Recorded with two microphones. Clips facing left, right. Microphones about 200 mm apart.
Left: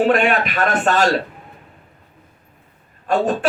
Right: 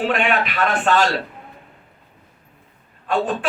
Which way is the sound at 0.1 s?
45° left (ahead or behind).